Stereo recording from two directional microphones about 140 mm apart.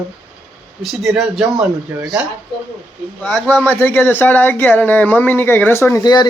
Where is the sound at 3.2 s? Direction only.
5° left (ahead or behind).